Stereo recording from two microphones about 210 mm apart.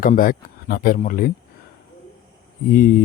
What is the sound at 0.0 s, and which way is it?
Speech, 40° left (ahead or behind).